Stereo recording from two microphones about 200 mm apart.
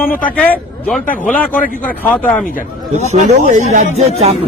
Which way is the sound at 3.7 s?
35° right (ahead or behind).